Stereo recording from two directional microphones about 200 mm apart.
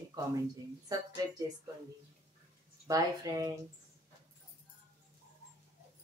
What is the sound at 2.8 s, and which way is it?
Speech, 20° right (ahead or behind).